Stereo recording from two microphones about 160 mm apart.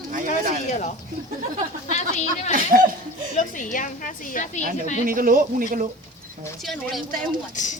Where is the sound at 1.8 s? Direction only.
45° left (ahead or behind).